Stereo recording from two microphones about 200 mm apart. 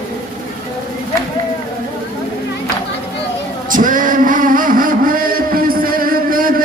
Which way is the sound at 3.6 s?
40° right (ahead or behind).